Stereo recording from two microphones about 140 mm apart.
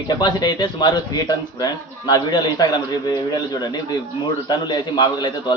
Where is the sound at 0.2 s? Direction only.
30° left (ahead or behind).